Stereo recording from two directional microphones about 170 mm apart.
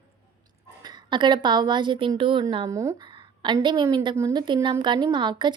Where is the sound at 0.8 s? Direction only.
25° right (ahead or behind).